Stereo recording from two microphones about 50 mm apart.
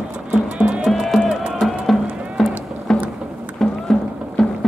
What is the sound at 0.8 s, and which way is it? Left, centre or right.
Music, centre.